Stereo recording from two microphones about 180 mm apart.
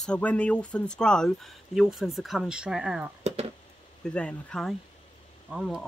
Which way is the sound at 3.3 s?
35° right (ahead or behind).